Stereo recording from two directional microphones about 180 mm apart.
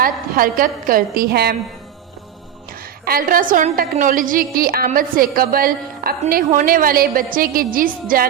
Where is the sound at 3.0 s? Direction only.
55° right (ahead or behind).